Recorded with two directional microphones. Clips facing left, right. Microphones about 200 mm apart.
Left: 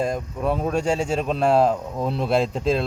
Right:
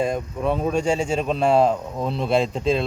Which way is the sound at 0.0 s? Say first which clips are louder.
Right 1 dB; centre (ahead or behind).